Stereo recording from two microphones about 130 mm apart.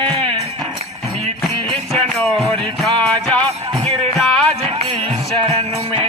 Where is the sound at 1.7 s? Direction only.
5° left (ahead or behind).